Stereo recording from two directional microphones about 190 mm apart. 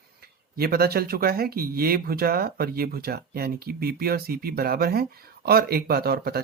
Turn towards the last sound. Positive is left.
turn(degrees=-55)  # may be behind; listen again after turning